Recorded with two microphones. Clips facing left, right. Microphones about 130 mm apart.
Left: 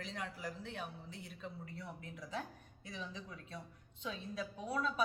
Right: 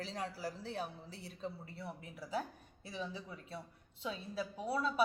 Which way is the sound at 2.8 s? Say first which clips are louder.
Right 3 dB; 30° right (ahead or behind).